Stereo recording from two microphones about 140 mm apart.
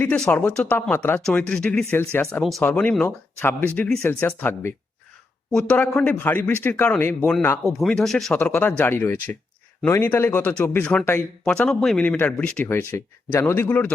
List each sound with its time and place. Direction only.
0.0 s speech: 10° left (ahead or behind)
1.8 s speech: 15° left (ahead or behind)
2.4 s speech: centre (ahead or behind)
7.8 s speech: 5° left (ahead or behind)